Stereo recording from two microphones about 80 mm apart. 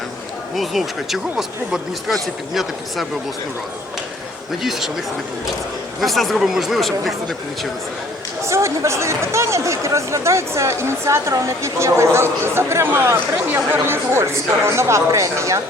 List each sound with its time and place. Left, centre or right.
0.5 s speech: centre
4.6 s speech: centre
6.0 s speech: centre
8.4 s speech: right